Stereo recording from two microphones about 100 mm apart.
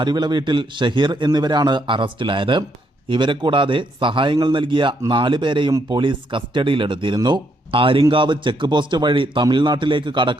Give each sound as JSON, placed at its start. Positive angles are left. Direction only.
{"t": 0.0, "sound": "a man's voice", "side_deg": -45}